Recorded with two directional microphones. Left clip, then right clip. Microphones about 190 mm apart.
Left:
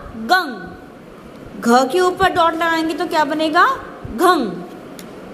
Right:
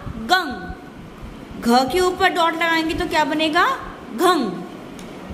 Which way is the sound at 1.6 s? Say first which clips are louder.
Left 3 dB; 10° left (ahead or behind).